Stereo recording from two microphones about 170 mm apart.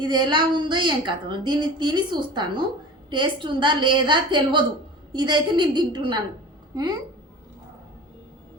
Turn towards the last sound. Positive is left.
turn(degrees=-25)  # may be behind; listen again after turning